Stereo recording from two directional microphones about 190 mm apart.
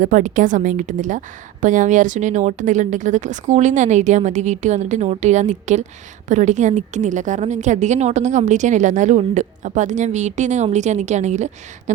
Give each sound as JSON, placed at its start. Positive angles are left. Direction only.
{"t": 0.0, "sound": "a woman's voice", "side_deg": -40}